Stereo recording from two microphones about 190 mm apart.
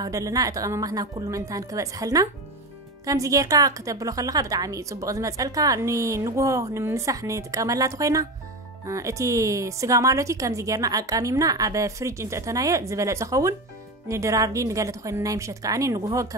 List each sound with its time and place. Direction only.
0.0 s a woman's voice: 20° right (ahead or behind)